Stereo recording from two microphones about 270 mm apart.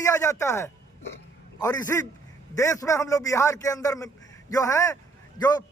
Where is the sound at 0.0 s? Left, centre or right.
Centre.